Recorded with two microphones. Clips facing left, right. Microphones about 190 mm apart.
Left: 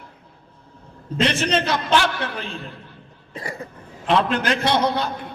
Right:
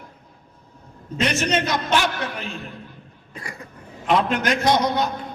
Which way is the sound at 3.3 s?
30° left (ahead or behind).